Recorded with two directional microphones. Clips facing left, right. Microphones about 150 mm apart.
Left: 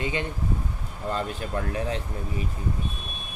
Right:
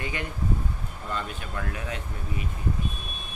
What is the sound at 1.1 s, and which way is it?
Speech, 35° left (ahead or behind).